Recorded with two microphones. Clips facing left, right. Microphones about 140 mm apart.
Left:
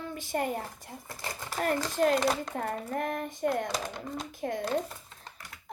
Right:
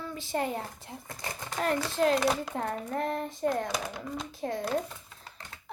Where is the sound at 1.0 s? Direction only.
20° right (ahead or behind).